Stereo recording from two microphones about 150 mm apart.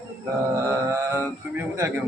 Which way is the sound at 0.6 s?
20° right (ahead or behind).